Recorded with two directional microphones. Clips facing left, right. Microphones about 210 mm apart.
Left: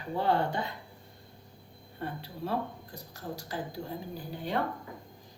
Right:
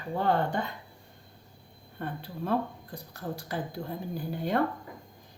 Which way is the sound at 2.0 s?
55° right (ahead or behind).